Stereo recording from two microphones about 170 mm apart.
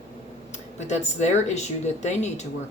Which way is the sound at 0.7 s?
40° left (ahead or behind).